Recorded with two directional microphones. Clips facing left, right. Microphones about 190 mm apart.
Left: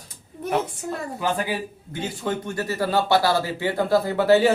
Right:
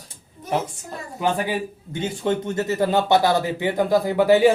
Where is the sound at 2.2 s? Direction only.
20° right (ahead or behind).